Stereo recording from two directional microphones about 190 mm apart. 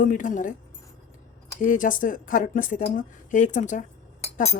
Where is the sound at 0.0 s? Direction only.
45° left (ahead or behind).